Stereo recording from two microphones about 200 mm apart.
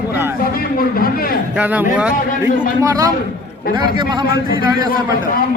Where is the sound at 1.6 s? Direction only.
5° right (ahead or behind).